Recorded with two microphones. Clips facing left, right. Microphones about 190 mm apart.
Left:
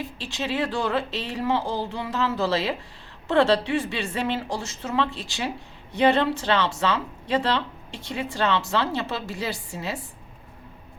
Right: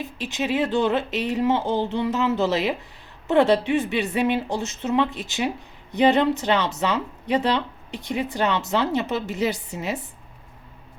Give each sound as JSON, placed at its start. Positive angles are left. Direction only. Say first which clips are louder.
{"t": 0.2, "sound": "speech", "louder": "right 4 dB", "side_deg": -20}